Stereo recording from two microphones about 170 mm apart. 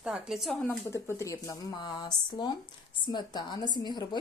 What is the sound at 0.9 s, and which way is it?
Speech, 15° left (ahead or behind).